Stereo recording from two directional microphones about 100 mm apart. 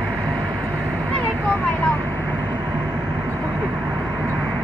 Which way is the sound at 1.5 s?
15° left (ahead or behind).